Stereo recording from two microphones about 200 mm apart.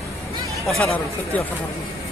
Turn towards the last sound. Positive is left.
turn(degrees=5)  # may be behind; listen again after turning